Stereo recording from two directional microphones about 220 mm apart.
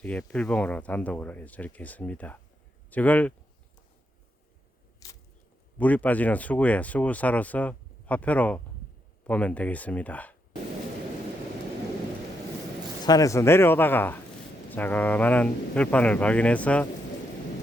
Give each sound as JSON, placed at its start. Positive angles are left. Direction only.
{"t": 0.0, "sound": "speech", "side_deg": 5}
{"t": 5.0, "sound": "arrow", "side_deg": 15}
{"t": 5.7, "sound": "speech", "side_deg": 5}
{"t": 13.1, "sound": "speech", "side_deg": 15}